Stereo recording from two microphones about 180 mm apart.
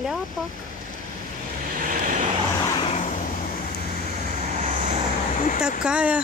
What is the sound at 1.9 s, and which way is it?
Vehicle, 50° right (ahead or behind).